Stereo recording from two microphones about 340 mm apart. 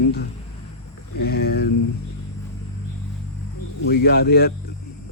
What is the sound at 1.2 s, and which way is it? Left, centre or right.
Speech, left.